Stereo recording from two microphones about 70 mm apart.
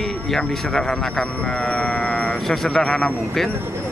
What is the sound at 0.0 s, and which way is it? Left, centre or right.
Speech, centre.